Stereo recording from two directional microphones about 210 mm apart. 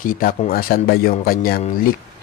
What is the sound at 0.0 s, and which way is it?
Speech, 45° left (ahead or behind).